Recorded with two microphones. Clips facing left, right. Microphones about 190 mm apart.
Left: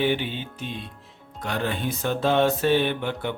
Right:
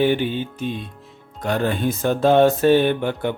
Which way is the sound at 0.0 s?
45° right (ahead or behind).